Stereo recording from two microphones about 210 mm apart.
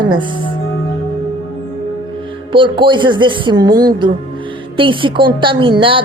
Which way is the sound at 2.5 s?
25° right (ahead or behind).